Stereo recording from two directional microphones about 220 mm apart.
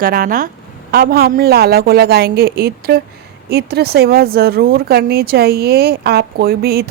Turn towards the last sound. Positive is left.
turn(degrees=-45)  # may be behind; listen again after turning